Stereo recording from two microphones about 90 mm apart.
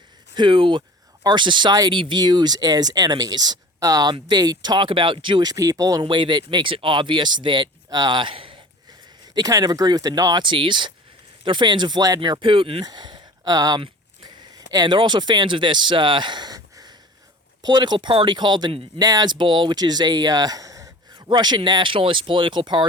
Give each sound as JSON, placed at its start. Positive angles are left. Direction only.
{"t": 0.3, "sound": "speech", "side_deg": -65}
{"t": 1.2, "sound": "speech", "side_deg": -55}
{"t": 3.8, "sound": "speech", "side_deg": -40}
{"t": 4.1, "sound": "speech", "side_deg": -50}
{"t": 5.5, "sound": "speech", "side_deg": -40}
{"t": 6.0, "sound": "speech", "side_deg": -60}
{"t": 9.3, "sound": "speech", "side_deg": -45}
{"t": 10.4, "sound": "speech", "side_deg": -60}
{"t": 12.8, "sound": "speech", "side_deg": -50}
{"t": 14.5, "sound": "a sound", "side_deg": -45}
{"t": 14.9, "sound": "speech", "side_deg": -55}
{"t": 17.6, "sound": "speech", "side_deg": -55}
{"t": 21.2, "sound": "speech", "side_deg": -55}